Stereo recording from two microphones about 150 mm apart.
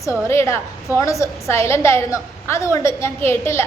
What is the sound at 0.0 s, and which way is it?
A woman's voice, 20° left (ahead or behind).